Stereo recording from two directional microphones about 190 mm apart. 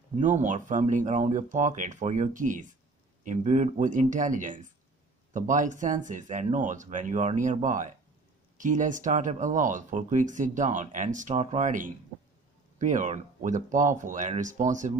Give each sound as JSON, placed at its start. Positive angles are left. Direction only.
{"t": 0.2, "sound": "speech", "side_deg": -40}